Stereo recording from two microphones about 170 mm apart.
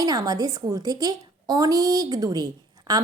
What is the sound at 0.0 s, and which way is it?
A woman's voice, 20° right (ahead or behind).